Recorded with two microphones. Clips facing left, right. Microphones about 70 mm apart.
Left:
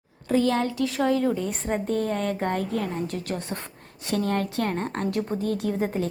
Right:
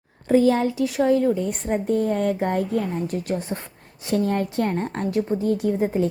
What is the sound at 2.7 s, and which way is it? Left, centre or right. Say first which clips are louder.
Speech: right 4 dB; centre.